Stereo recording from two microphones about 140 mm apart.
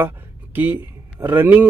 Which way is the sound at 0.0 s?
15° right (ahead or behind).